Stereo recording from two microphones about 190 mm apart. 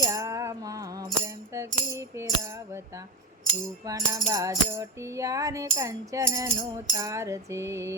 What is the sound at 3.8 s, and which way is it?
Music, 15° right (ahead or behind).